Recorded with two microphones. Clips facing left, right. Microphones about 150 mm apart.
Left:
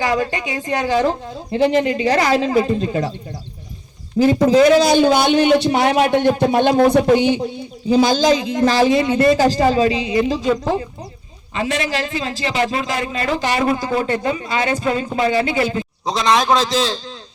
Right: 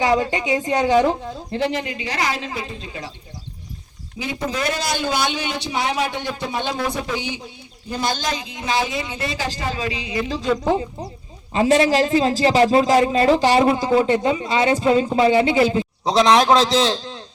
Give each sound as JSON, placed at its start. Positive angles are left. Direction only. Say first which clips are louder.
{"t": 0.0, "sound": "a man's voice", "louder": "right 1 dB", "side_deg": -20}
{"t": 1.7, "sound": "speech", "louder": "left 10 dB", "side_deg": 40}
{"t": 4.2, "sound": "speech", "louder": "left 16 dB", "side_deg": 50}
{"t": 4.7, "sound": "a man's voice", "louder": "left 11 dB", "side_deg": 85}
{"t": 7.9, "sound": "speech", "louder": "left 10 dB", "side_deg": 90}
{"t": 10.2, "sound": "speech", "louder": "left 4 dB", "side_deg": 10}
{"t": 11.5, "sound": "a man's voice", "louder": "right 6 dB", "side_deg": -35}